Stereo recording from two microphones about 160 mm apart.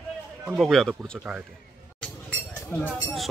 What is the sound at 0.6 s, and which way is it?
Speech, centre (ahead or behind).